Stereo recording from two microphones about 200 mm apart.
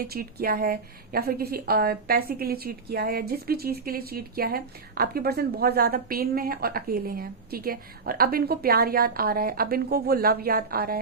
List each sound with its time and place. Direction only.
0.0 s a woman's voice: 50° right (ahead or behind)